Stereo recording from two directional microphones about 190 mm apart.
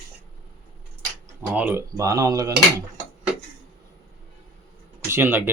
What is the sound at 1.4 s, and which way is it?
Speech, 10° right (ahead or behind).